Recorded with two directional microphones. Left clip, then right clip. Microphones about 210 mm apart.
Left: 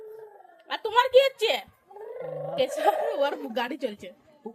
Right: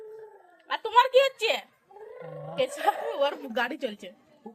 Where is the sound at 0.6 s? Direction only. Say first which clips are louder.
Right 2 dB; 15° left (ahead or behind).